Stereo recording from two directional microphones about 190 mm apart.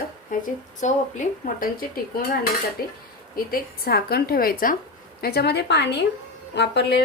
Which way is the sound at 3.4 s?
50° left (ahead or behind).